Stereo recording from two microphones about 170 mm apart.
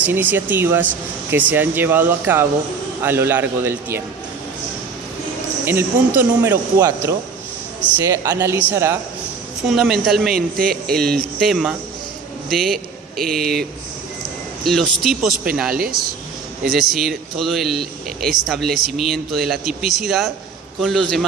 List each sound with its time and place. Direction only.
0.0 s speech: 10° right (ahead or behind)
5.6 s speech: 15° right (ahead or behind)
9.6 s speech: centre (ahead or behind)
10.3 s speech: 60° right (ahead or behind)
10.8 s speech: 5° left (ahead or behind)
15.7 s speech: 60° right (ahead or behind)
16.6 s speech: centre (ahead or behind)